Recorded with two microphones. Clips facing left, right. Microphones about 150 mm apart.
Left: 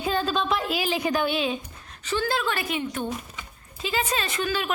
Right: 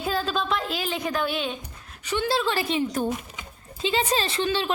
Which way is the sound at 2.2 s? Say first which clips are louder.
Right 4 dB; 30° right (ahead or behind).